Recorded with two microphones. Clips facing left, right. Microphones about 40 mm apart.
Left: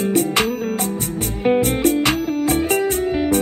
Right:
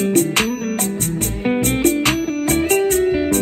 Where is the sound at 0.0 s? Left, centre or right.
Right.